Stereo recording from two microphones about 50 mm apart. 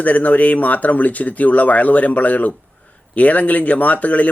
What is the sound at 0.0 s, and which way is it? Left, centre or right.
Speech, left.